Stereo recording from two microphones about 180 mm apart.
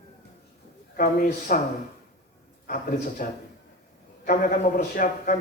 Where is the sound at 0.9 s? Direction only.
50° left (ahead or behind).